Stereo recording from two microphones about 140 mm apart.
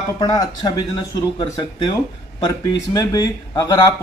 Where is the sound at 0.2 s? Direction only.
25° left (ahead or behind).